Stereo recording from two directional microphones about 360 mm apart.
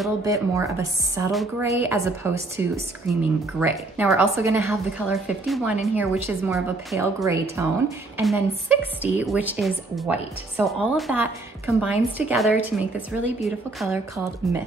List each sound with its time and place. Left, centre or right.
0.0 s a woman's voice: centre